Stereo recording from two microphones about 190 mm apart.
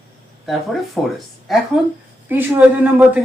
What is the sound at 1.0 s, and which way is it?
Speech, 5° left (ahead or behind).